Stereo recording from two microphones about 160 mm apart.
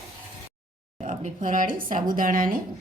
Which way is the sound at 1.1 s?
55° right (ahead or behind).